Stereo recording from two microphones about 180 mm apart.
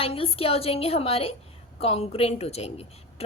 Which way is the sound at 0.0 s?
30° left (ahead or behind).